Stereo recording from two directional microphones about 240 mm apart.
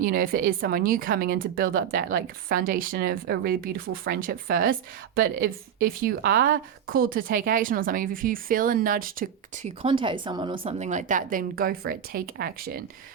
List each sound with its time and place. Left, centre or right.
0.0 s speech: right
9.8 s speech: right